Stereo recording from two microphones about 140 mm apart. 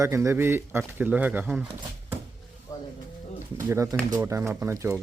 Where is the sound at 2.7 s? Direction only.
25° left (ahead or behind).